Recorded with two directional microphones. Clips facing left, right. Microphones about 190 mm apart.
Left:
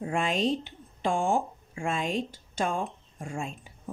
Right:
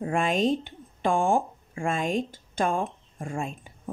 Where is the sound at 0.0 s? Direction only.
50° right (ahead or behind).